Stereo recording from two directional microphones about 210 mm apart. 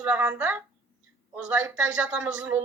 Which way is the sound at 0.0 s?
5° right (ahead or behind).